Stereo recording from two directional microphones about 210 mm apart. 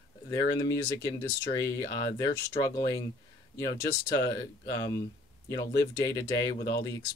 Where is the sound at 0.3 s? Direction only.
20° left (ahead or behind).